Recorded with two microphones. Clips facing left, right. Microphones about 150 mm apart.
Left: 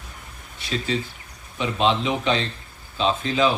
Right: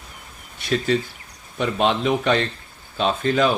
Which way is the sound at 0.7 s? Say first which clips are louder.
Right 5 dB; 55° right (ahead or behind).